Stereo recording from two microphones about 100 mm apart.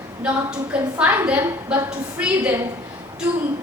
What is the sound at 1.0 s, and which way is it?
A woman's voice, 15° right (ahead or behind).